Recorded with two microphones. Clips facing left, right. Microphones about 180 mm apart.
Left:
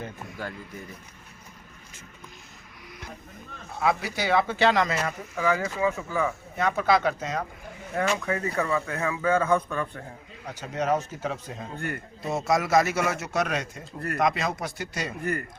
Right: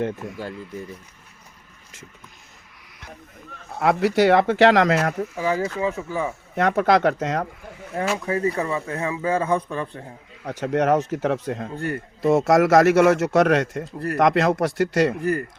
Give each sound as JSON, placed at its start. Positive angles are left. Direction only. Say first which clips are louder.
{"t": 3.8, "sound": "speech", "louder": "right 8 dB", "side_deg": -75}
{"t": 5.4, "sound": "a man's voice", "louder": "right 1 dB", "side_deg": -30}
{"t": 6.6, "sound": "speech", "louder": "right 5 dB", "side_deg": -75}
{"t": 8.2, "sound": "a man's voice", "louder": "right 4 dB", "side_deg": -30}
{"t": 10.4, "sound": "speech", "louder": "right 8 dB", "side_deg": -85}
{"t": 12.2, "sound": "a man's voice", "louder": "right 9 dB", "side_deg": -90}
{"t": 15.2, "sound": "speech", "louder": "right 6 dB", "side_deg": -35}